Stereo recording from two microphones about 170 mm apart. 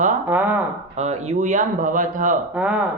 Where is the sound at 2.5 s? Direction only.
5° right (ahead or behind).